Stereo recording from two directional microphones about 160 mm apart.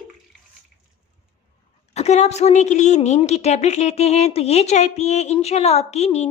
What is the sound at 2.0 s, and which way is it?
A woman's voice, 45° left (ahead or behind).